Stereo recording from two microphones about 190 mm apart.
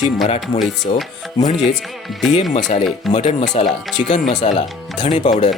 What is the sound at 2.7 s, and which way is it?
Speech, 35° left (ahead or behind).